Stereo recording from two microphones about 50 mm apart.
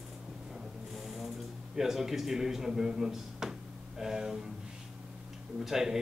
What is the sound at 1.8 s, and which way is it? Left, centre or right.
Speech, centre.